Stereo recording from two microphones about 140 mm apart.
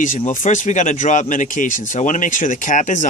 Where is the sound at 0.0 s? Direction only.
65° left (ahead or behind).